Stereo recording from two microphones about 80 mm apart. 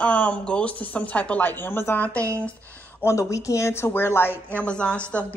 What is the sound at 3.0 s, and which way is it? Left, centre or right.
Speech, left.